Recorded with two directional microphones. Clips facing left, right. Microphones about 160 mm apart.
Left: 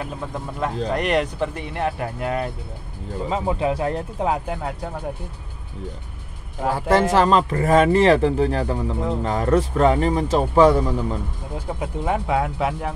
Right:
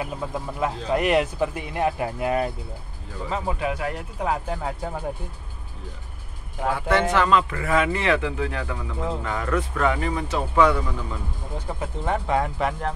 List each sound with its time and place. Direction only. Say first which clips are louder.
0.0 s speech: even; 5° right (ahead or behind)
3.3 s speech: left 4 dB; 20° left (ahead or behind)
6.7 s speech: left 4 dB; 40° left (ahead or behind)
11.5 s speech: left 3 dB; 10° left (ahead or behind)